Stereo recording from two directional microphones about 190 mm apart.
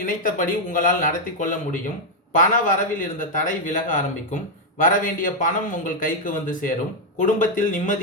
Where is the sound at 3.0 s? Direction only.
45° left (ahead or behind).